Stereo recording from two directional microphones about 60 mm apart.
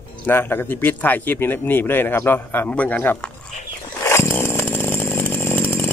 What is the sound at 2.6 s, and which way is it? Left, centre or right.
Speech, left.